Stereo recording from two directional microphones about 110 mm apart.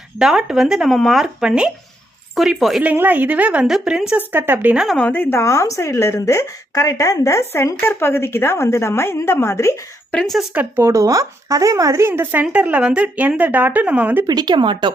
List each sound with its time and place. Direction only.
0.2 s speech: 5° right (ahead or behind)
2.8 s speech: 15° right (ahead or behind)
4.3 s speech: 20° right (ahead or behind)
4.9 s a woman's voice: 15° left (ahead or behind)
10.1 s speech: 5° left (ahead or behind)
10.5 s speech: 15° right (ahead or behind)
10.8 s speech: 30° right (ahead or behind)
14.3 s speech: 40° right (ahead or behind)